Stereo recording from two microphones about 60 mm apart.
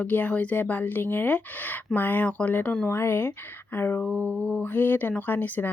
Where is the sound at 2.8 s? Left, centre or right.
Left.